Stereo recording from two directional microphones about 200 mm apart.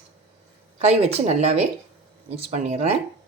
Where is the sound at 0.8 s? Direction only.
35° right (ahead or behind).